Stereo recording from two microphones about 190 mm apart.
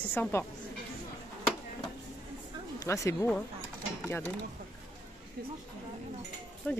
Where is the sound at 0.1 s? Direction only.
10° left (ahead or behind).